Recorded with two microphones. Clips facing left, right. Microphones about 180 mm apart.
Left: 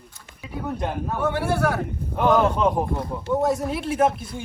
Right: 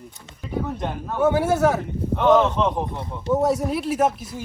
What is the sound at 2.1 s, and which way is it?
Speech, 5° left (ahead or behind).